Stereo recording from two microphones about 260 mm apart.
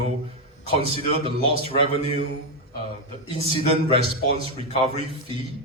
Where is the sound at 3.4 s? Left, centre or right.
Right.